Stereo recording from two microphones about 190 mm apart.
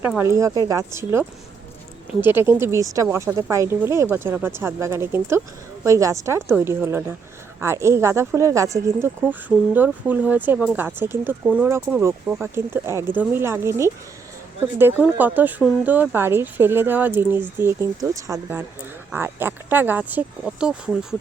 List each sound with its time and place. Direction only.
0.2 s speech: 15° right (ahead or behind)
2.2 s speech: 10° right (ahead or behind)